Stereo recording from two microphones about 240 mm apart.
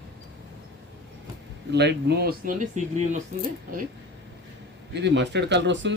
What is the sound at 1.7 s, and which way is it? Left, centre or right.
Speech, right.